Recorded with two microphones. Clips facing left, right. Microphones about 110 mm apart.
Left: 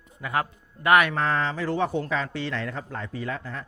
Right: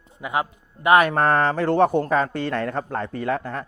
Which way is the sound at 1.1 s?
55° right (ahead or behind).